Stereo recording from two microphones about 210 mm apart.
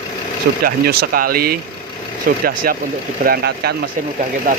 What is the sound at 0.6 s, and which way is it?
Speech, 45° right (ahead or behind).